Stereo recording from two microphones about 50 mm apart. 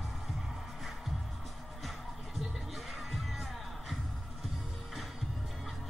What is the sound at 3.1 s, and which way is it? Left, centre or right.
Music, centre.